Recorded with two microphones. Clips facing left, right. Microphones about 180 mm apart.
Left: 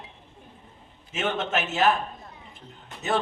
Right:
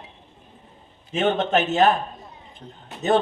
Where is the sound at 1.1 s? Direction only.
35° right (ahead or behind).